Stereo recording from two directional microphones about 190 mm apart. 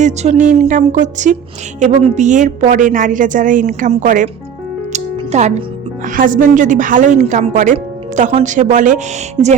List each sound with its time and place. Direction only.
0.0 s a woman's voice: 35° right (ahead or behind)
4.9 s music: 35° right (ahead or behind)
6.1 s a woman's voice: 45° right (ahead or behind)